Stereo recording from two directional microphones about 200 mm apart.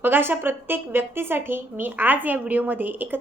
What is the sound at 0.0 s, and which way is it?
A woman's voice, 10° right (ahead or behind).